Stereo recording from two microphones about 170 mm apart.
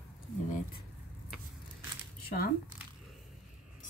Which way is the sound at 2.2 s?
60° left (ahead or behind).